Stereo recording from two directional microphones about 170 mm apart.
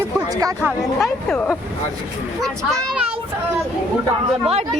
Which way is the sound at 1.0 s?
5° left (ahead or behind).